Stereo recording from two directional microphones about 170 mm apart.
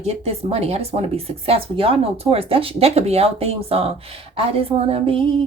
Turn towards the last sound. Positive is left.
turn(degrees=-35)  # may be behind; listen again after turning